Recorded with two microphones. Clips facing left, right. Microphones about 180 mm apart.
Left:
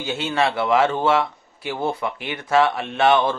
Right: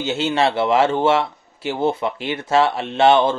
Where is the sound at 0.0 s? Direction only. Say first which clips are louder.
Right 3 dB; 25° right (ahead or behind).